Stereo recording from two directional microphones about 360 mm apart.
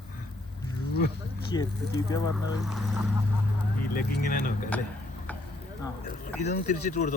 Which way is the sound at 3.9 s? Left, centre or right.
Left.